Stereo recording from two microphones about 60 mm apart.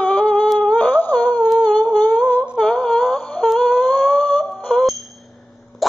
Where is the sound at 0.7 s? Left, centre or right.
Left.